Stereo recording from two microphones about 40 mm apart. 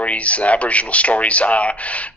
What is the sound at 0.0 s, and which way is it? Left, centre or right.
A man's voice, left.